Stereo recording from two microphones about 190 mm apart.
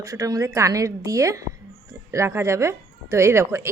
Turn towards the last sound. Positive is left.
turn(degrees=-15)  # may be behind; listen again after turning